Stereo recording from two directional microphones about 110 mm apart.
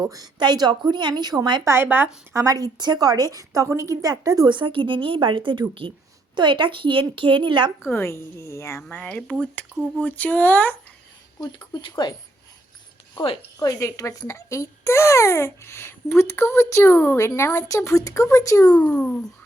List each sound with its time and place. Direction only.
0.0 s a woman's voice: 35° right (ahead or behind)
1.6 s speech: 20° right (ahead or behind)
2.3 s a woman's voice: 30° right (ahead or behind); by 7.7 s 45° right (ahead or behind)
7.9 s a child's voice: 20° left (ahead or behind)
11.3 s speech: 45° left (ahead or behind)
13.6 s a child's voice: 35° left (ahead or behind)
18.8 s speech: 10° left (ahead or behind)